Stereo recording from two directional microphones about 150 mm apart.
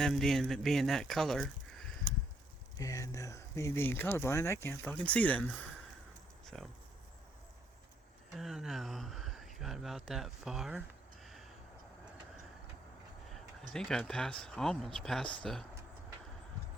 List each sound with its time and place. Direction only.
0.0 s speech: centre (ahead or behind)
2.7 s speech: 20° left (ahead or behind)
6.4 s a sound: centre (ahead or behind)
8.4 s speech: centre (ahead or behind)
13.7 s speech: 5° left (ahead or behind)